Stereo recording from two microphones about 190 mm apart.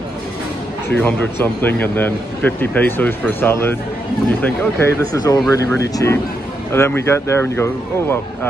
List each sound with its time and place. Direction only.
0.8 s a man's voice: 10° left (ahead or behind)